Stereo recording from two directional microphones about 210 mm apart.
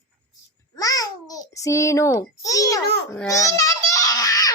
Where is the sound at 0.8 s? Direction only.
15° left (ahead or behind).